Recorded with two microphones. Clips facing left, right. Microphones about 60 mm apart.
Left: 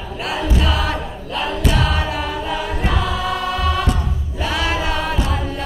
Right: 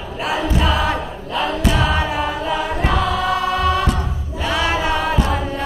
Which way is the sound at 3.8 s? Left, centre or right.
Right.